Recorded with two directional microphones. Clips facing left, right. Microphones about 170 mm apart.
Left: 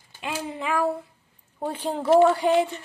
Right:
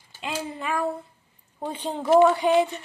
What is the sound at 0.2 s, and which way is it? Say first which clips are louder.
Speech: left 1 dB; 5° left (ahead or behind).